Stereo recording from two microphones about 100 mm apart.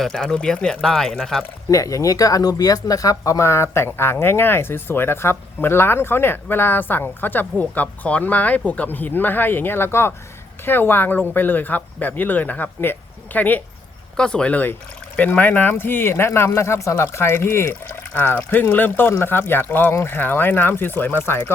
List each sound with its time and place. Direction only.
0.0 s speech: 5° left (ahead or behind)
1.7 s speech: 35° left (ahead or behind)